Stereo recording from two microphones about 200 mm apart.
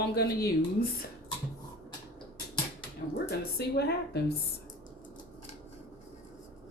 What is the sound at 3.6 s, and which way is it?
Speech, 55° left (ahead or behind).